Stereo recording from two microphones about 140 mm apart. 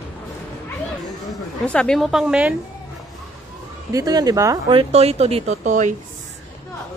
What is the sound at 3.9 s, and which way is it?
Speech, 25° right (ahead or behind).